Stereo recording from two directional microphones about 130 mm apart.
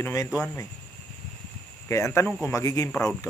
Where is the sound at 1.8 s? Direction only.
20° left (ahead or behind).